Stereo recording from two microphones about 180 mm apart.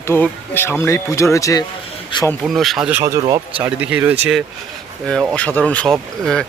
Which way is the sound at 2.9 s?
15° right (ahead or behind).